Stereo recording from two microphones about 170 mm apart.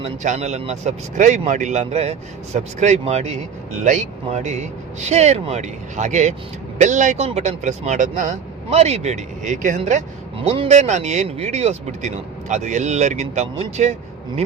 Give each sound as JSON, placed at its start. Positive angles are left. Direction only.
{"t": 0.0, "sound": "speech", "side_deg": -45}